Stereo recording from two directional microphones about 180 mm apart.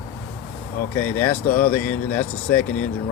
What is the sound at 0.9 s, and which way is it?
Speech, 10° left (ahead or behind).